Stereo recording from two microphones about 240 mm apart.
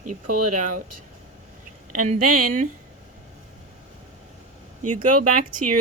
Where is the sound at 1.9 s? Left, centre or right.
Right.